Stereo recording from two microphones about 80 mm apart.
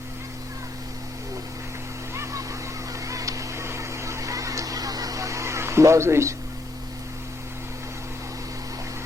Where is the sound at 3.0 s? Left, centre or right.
Right.